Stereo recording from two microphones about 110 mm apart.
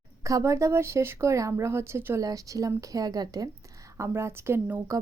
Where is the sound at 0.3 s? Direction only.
30° right (ahead or behind).